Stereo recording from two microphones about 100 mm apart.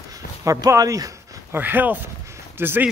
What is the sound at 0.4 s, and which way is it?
Speech, 30° right (ahead or behind).